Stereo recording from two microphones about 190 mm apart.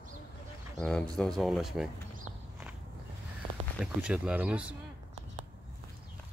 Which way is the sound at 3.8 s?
5° right (ahead or behind).